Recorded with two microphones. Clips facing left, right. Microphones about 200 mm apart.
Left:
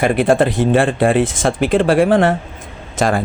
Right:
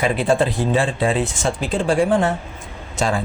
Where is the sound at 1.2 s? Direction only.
90° left.